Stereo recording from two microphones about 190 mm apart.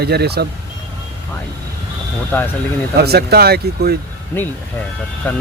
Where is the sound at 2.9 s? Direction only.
55° right (ahead or behind).